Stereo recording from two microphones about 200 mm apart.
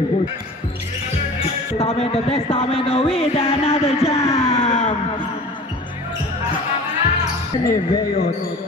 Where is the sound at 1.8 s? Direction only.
30° left (ahead or behind).